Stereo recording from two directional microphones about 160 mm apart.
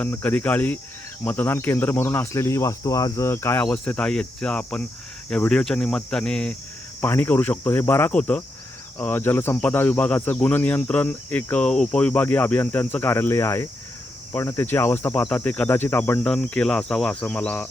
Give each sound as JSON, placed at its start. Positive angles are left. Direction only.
{"t": 0.0, "sound": "speech", "side_deg": 10}